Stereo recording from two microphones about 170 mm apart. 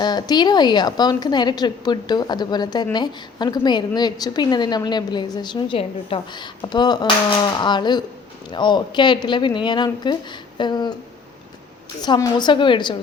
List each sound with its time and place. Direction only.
0.0 s a woman's voice: 25° left (ahead or behind)
12.0 s a woman's voice: 25° left (ahead or behind)